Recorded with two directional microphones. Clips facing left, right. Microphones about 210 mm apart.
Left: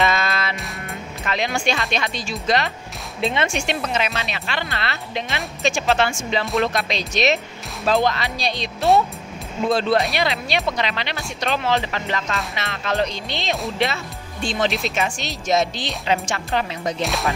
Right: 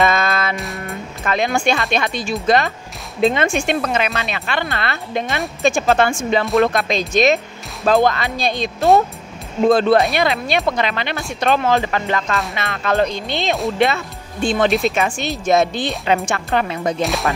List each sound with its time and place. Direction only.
0.0 s music: 50° right (ahead or behind)
1.2 s speech: 50° right (ahead or behind)
9.7 s speech: 50° right (ahead or behind)
17.0 s music: centre (ahead or behind)